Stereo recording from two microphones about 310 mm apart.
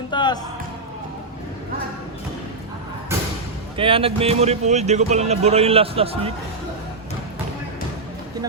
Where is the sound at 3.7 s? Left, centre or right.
Centre.